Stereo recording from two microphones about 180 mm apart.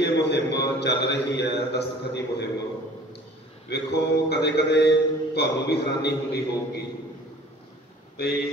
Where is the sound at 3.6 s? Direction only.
65° left (ahead or behind).